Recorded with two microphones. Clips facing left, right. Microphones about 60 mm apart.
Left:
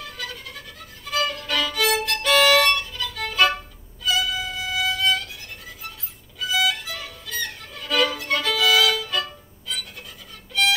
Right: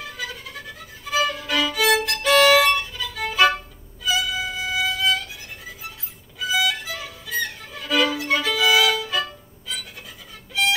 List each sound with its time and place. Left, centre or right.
0.0 s violin: centre
8.5 s music: centre